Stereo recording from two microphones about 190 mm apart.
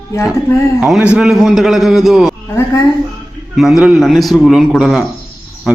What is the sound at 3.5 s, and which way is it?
Speech, centre (ahead or behind).